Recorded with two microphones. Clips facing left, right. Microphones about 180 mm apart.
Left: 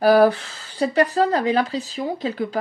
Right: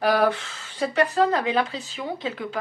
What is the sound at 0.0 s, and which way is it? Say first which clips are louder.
Speech: left 6 dB; 35° left (ahead or behind).